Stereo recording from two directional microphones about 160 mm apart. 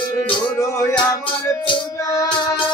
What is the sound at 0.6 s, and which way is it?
Music, 20° left (ahead or behind).